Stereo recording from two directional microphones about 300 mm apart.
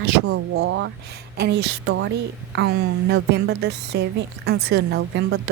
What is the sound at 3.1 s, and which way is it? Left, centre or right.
A woman's voice, right.